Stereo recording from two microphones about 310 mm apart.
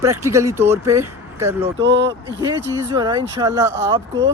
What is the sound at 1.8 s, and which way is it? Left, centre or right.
Speech, right.